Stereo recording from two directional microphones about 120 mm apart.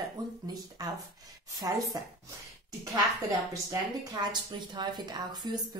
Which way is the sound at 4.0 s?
35° right (ahead or behind).